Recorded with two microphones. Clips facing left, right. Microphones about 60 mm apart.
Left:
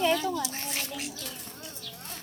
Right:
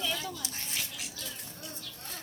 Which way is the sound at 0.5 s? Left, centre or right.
Left.